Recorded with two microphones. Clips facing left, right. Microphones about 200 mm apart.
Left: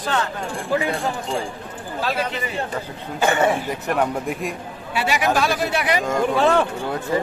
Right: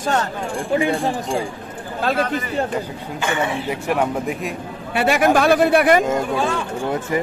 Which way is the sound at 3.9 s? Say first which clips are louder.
Right 1 dB; 5° right (ahead or behind).